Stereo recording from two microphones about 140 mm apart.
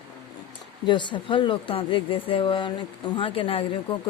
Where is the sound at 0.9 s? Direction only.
35° left (ahead or behind).